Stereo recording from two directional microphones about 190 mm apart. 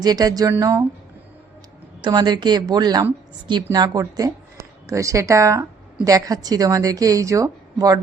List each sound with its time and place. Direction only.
0.0 s speech: 20° right (ahead or behind)
2.0 s speech: 25° right (ahead or behind)